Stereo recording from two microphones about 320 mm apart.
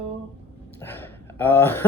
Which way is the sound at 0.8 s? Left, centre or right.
Centre.